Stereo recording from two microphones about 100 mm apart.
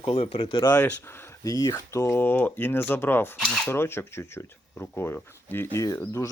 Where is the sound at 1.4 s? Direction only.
35° left (ahead or behind).